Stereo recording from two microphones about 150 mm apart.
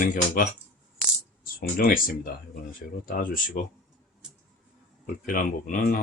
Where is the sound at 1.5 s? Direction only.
70° left (ahead or behind).